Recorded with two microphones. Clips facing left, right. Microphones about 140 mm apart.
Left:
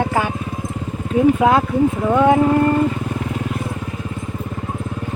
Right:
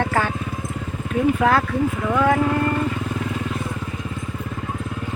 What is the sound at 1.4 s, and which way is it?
Speech, 20° left (ahead or behind).